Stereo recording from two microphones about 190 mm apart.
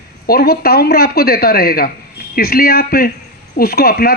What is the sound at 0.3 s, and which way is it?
Speech, 50° left (ahead or behind).